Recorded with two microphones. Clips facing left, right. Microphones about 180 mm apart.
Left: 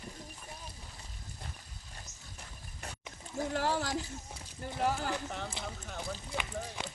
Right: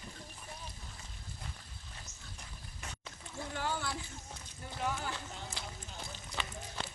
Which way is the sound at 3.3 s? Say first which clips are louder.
Left 6 dB; 40° left (ahead or behind).